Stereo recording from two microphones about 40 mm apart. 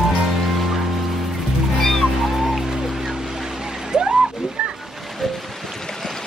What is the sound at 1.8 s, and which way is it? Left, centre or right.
Music, centre.